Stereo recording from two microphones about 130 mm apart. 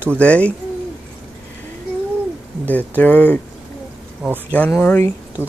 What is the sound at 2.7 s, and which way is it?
Speech, 10° left (ahead or behind).